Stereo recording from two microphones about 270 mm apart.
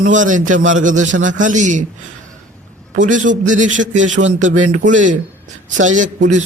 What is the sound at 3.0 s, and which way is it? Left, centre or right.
A man's voice, right.